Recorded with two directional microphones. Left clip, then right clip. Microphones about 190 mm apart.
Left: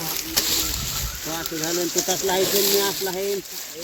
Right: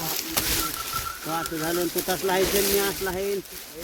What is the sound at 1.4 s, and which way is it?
Speech, centre (ahead or behind).